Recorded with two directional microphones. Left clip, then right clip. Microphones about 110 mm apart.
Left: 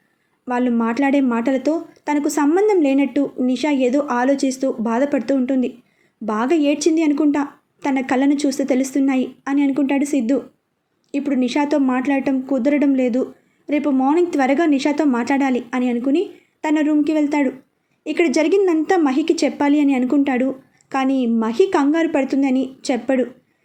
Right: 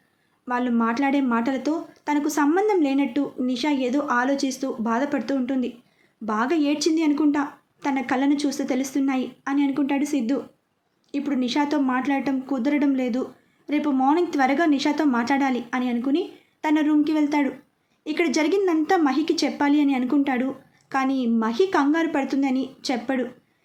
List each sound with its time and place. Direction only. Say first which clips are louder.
0.4 s speech: left 4 dB; 30° left (ahead or behind)